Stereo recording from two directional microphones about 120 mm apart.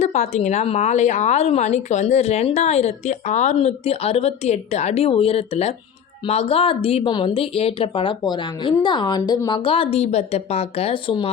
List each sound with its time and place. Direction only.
0.0 s a woman's voice: 70° left (ahead or behind); by 9.6 s 35° left (ahead or behind)
9.6 s speech: 50° left (ahead or behind)